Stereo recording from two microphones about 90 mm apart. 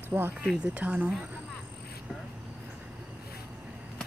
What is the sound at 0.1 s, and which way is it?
Speech, 25° right (ahead or behind).